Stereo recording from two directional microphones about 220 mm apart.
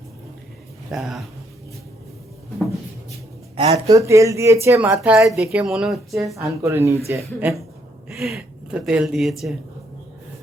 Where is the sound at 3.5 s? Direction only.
30° right (ahead or behind).